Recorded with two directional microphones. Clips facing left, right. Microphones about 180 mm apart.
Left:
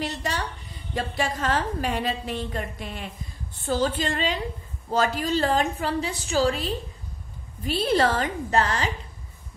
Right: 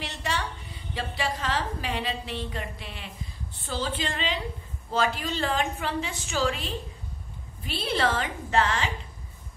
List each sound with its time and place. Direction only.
0.0 s a woman's voice: 40° left (ahead or behind)